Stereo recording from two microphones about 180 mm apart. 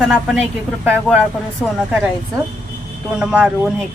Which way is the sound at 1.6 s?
Centre (ahead or behind).